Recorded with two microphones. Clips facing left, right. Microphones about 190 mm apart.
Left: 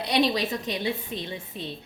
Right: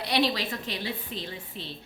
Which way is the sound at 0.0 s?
20° left (ahead or behind).